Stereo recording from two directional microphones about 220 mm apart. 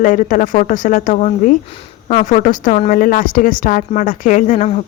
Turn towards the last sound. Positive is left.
turn(degrees=35)  # may be behind; listen again after turning